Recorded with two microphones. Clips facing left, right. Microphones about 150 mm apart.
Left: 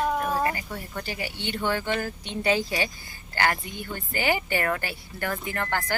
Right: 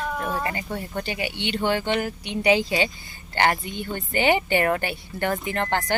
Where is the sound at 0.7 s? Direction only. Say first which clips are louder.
Right 5 dB; 25° right (ahead or behind).